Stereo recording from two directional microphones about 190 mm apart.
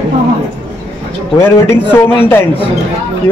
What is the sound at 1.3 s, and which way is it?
A man's voice, 10° left (ahead or behind).